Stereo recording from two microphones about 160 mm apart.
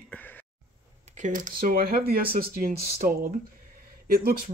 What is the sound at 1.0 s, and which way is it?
Speech, 50° right (ahead or behind).